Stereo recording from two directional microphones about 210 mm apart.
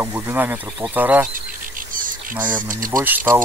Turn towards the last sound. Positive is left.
turn(degrees=-10)  # may be behind; listen again after turning